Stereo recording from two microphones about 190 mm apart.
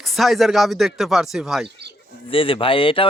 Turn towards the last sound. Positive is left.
turn(degrees=30)  # may be behind; listen again after turning